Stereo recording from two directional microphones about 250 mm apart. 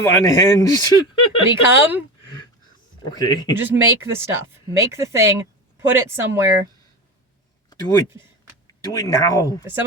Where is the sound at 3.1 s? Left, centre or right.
Centre.